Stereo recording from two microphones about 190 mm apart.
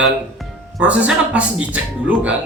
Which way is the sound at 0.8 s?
5° right (ahead or behind).